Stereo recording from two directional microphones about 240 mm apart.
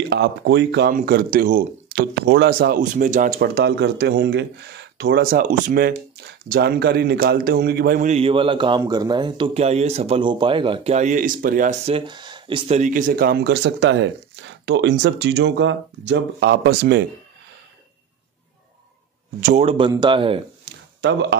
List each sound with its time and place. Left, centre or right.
0.1 s a man's voice: right
19.4 s speech: right
21.0 s speech: right